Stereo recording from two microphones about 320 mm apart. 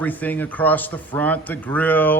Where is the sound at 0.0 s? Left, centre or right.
Centre.